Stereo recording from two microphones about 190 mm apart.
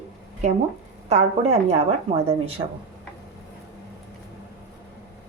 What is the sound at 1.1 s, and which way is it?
Speech, 35° right (ahead or behind).